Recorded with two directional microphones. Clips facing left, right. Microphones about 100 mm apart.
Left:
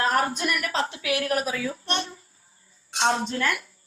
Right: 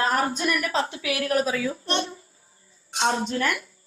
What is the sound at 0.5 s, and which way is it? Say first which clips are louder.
A child's voice: right 2 dB; 25° right (ahead or behind).